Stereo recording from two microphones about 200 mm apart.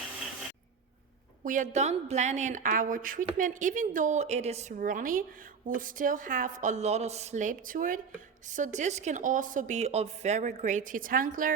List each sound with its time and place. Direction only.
1.5 s a woman's voice: 40° right (ahead or behind)